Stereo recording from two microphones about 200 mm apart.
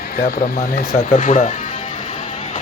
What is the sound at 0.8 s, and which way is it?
Speech, 40° left (ahead or behind).